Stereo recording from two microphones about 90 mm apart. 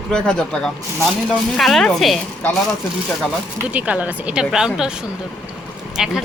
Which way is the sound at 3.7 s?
15° right (ahead or behind).